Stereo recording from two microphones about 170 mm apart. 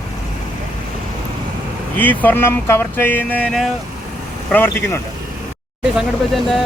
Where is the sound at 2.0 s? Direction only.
10° left (ahead or behind).